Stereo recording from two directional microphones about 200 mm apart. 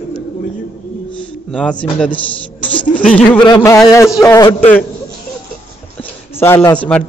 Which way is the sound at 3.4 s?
20° left (ahead or behind).